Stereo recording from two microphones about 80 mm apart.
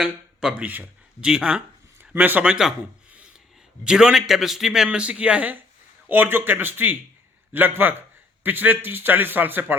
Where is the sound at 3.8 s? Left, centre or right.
Centre.